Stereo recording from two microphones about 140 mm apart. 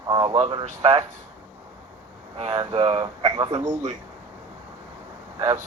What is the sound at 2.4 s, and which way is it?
Speech, 25° right (ahead or behind).